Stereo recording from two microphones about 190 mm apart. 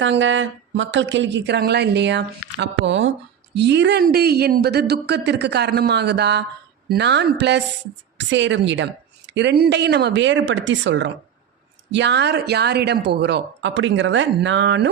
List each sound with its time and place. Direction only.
0.0 s a woman's voice: 80° right
11.9 s a woman's voice: 65° right (ahead or behind)